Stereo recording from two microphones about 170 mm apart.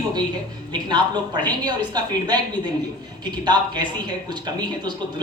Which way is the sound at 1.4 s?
25° right (ahead or behind).